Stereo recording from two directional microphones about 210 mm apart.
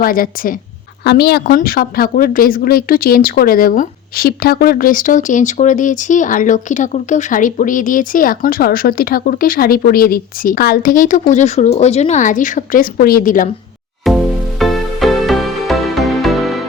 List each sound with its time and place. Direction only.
0.0 s a woman's voice: 45° left (ahead or behind)
14.0 s music: centre (ahead or behind)